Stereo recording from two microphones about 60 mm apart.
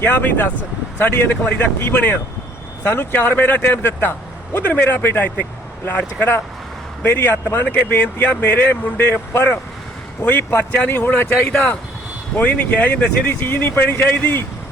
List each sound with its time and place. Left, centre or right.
0.0 s speech: left
10.2 s speech: left
12.4 s speech: left
13.2 s speech: left
14.2 s speech: left